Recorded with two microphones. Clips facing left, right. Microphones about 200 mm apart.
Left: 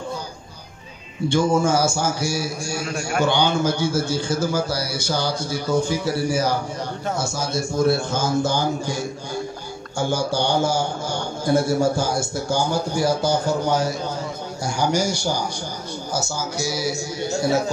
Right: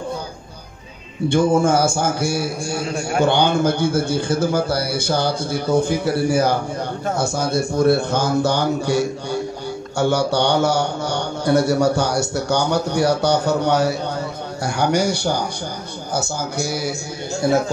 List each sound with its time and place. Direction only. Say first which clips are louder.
1.3 s a man's voice: right 3 dB; 55° right (ahead or behind)